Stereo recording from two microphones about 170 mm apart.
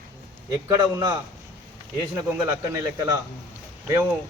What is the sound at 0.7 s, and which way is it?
Speech, 25° right (ahead or behind).